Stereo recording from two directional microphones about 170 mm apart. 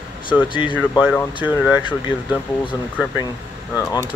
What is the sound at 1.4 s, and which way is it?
Speech, 10° right (ahead or behind).